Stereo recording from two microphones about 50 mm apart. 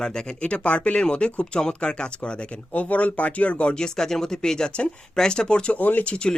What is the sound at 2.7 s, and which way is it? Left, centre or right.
Speech, left.